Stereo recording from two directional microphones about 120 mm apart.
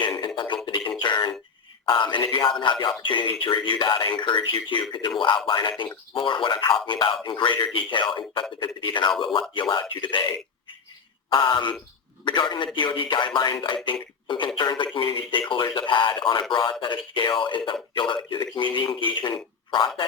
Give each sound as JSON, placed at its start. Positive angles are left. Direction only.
{"t": 0.0, "sound": "a sound", "side_deg": 40}
{"t": 1.9, "sound": "speech", "side_deg": 40}
{"t": 11.3, "sound": "speech", "side_deg": 45}